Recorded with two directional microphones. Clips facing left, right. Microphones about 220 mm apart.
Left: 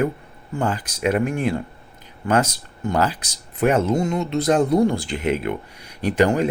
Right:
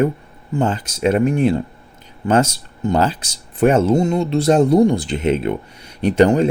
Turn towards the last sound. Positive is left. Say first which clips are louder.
# right 5 dB
turn(degrees=-25)  # may be behind; listen again after turning